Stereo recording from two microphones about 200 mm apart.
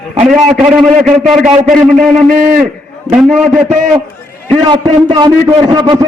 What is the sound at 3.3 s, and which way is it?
Speech, 5° right (ahead or behind).